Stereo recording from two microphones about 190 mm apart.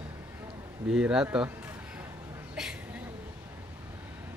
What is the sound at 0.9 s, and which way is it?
Speech, 5° right (ahead or behind).